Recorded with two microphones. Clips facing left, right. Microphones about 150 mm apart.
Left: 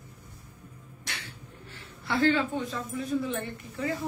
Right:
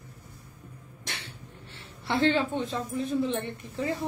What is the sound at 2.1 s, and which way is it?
Speech, 25° right (ahead or behind).